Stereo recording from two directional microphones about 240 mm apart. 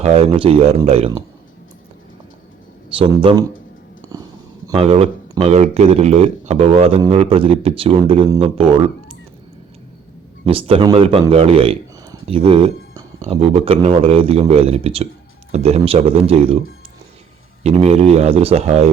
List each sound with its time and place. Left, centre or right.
0.0 s speech: right
2.9 s speech: right
4.8 s speech: right
10.4 s speech: right